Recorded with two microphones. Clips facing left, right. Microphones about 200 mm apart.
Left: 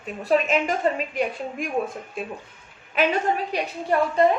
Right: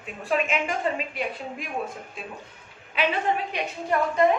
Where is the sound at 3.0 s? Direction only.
40° left (ahead or behind).